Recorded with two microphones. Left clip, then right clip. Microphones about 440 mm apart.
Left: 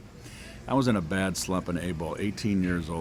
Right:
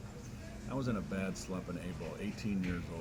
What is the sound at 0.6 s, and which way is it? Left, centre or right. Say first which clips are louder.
Speech: left 13 dB; left.